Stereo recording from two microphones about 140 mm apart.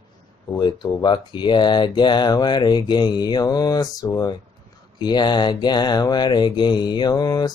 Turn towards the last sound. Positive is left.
turn(degrees=30)  # may be behind; listen again after turning